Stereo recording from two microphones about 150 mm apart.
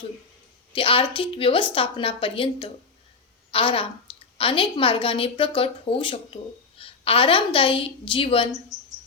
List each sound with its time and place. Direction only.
0.7 s a woman's voice: 35° left (ahead or behind)